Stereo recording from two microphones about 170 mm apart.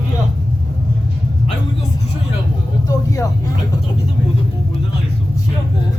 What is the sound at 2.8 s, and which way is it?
Vehicle, 20° left (ahead or behind).